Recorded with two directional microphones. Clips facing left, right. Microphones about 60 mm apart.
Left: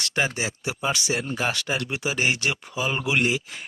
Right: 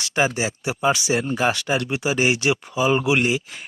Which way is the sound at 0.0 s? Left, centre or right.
Centre.